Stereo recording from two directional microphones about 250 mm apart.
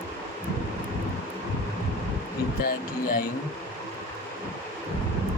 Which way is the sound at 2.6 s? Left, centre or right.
Left.